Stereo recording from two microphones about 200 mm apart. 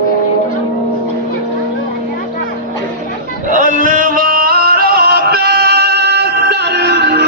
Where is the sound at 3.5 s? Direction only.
40° right (ahead or behind).